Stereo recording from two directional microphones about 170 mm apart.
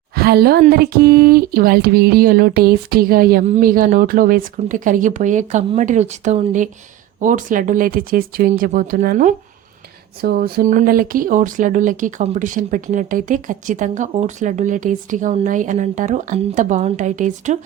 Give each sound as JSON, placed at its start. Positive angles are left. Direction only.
{"t": 0.1, "sound": "a woman's voice", "side_deg": -65}
{"t": 10.2, "sound": "speech", "side_deg": -65}